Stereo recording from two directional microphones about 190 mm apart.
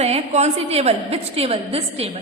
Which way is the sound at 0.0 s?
35° right (ahead or behind).